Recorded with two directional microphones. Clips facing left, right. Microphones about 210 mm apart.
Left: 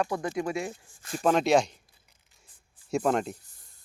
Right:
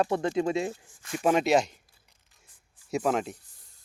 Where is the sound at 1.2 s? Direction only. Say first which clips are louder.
Even; 10° right (ahead or behind).